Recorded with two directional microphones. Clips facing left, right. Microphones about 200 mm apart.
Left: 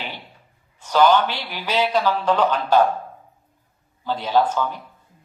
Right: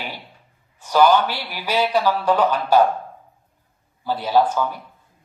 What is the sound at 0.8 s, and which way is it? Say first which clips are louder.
Speech: right 1 dB; 10° right (ahead or behind).